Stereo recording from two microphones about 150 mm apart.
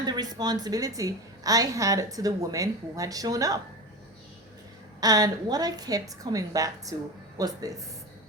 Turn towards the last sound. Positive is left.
turn(degrees=-25)  # may be behind; listen again after turning